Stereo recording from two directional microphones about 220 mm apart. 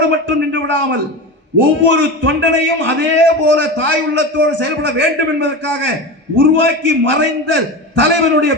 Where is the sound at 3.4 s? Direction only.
55° right (ahead or behind).